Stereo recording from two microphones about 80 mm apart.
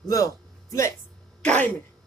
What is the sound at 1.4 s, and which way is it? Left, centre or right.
Speech, centre.